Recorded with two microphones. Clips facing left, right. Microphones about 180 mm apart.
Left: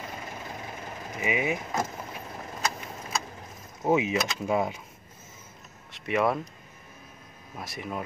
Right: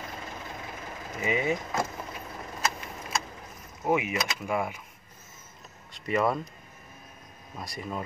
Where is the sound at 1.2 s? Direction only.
10° left (ahead or behind).